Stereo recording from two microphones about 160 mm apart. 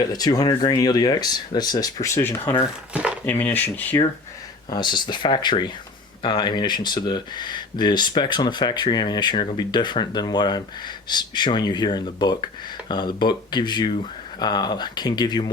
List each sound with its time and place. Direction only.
0.1 s speech: 25° left (ahead or behind)
4.7 s speech: 30° left (ahead or behind)